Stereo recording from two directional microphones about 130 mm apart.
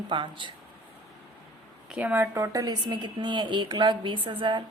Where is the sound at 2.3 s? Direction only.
25° right (ahead or behind).